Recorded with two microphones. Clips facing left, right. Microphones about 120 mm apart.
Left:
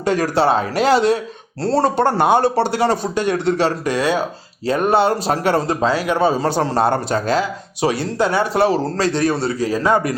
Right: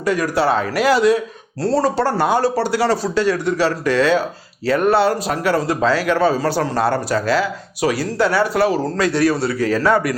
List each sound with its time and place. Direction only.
0.0 s a man's voice: 25° left (ahead or behind)